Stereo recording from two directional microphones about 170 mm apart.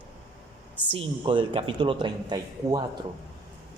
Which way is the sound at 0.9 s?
30° right (ahead or behind).